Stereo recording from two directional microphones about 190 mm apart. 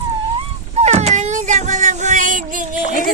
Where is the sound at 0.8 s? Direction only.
35° right (ahead or behind).